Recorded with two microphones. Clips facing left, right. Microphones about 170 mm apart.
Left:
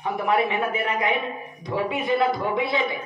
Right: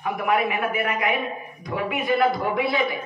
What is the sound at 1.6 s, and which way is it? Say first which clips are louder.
Speech: even; 30° left (ahead or behind).